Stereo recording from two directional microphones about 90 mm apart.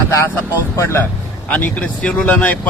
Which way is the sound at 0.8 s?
30° left (ahead or behind).